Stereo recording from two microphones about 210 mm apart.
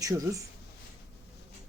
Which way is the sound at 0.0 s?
15° right (ahead or behind).